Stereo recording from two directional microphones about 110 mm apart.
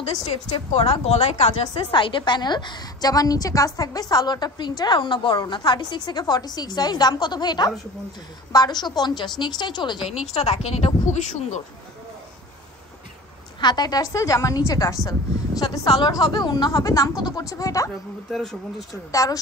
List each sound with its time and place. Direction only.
0.0 s a woman's voice: 65° left (ahead or behind)
1.9 s a woman's voice: 45° left (ahead or behind)
10.3 s speech: 75° left (ahead or behind)
13.6 s a woman's voice: 40° left (ahead or behind)
18.3 s speech: centre (ahead or behind)